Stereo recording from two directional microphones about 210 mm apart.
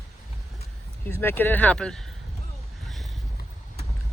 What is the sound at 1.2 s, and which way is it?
Speech, 10° left (ahead or behind).